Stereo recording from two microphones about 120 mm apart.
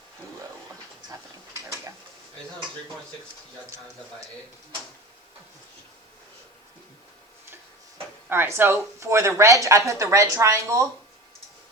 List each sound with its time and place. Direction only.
7.5 s speech: 20° right (ahead or behind)